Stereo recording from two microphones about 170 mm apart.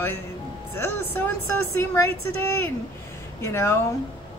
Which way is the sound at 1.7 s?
15° left (ahead or behind).